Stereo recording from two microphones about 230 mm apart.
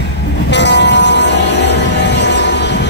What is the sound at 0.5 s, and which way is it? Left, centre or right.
Music, left.